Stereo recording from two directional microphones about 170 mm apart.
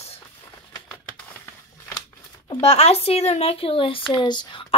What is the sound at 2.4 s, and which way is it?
Speech, 40° left (ahead or behind).